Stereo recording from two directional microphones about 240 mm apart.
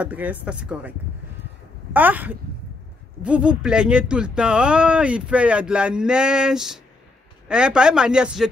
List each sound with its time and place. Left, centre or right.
0.0 s speech: centre
2.0 s speech: centre